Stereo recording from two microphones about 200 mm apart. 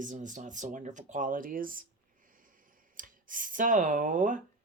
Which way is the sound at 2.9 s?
40° right (ahead or behind).